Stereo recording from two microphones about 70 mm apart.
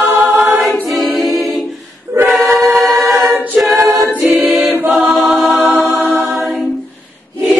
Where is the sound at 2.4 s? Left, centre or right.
Centre.